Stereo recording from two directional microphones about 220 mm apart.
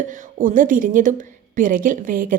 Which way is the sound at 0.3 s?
35° right (ahead or behind).